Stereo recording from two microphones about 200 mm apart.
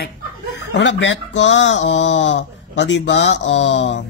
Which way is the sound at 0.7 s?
70° left (ahead or behind).